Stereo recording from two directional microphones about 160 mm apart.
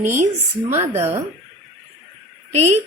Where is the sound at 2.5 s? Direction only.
45° right (ahead or behind).